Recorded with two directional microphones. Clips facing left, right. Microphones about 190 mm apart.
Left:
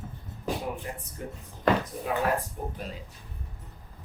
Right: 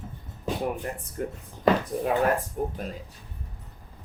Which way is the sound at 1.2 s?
55° right (ahead or behind).